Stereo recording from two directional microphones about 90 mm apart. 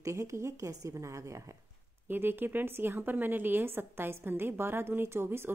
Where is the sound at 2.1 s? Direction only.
25° right (ahead or behind).